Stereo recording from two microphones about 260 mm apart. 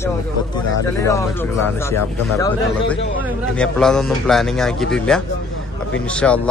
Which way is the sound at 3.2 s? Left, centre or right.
Centre.